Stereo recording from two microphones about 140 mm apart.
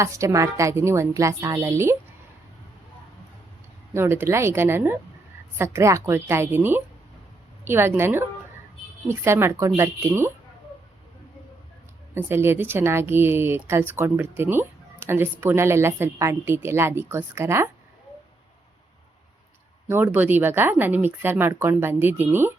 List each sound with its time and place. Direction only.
0.0 s a woman's voice: 20° right (ahead or behind)
3.9 s speech: 15° right (ahead or behind)
12.1 s speech: 15° right (ahead or behind)
19.9 s speech: 15° right (ahead or behind)